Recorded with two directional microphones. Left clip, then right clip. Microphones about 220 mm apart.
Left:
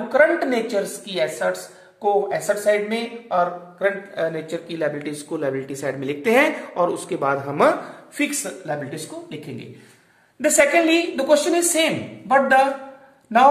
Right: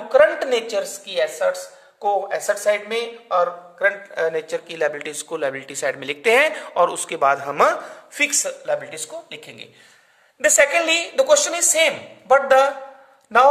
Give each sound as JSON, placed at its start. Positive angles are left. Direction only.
{"t": 0.1, "sound": "speech", "side_deg": -45}